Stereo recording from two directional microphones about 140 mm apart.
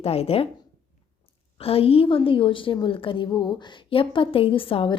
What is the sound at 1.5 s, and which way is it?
A woman's voice, 45° left (ahead or behind).